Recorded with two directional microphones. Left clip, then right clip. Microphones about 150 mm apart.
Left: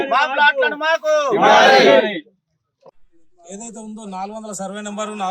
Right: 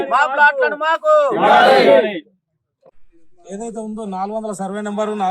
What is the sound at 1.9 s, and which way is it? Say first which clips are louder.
Speech: right 1 dB; 35° left (ahead or behind).